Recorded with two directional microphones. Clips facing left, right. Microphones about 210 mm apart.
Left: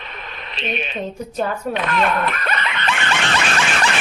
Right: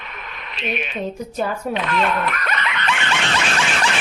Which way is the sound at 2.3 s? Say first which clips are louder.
Left 1 dB; 30° left (ahead or behind).